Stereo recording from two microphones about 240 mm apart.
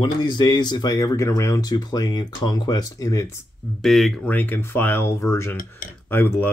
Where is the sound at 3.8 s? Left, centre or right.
Centre.